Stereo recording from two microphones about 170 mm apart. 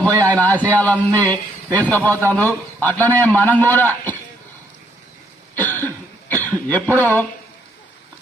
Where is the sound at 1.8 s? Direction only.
10° left (ahead or behind).